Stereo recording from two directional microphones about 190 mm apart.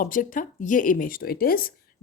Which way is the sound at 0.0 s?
45° left (ahead or behind).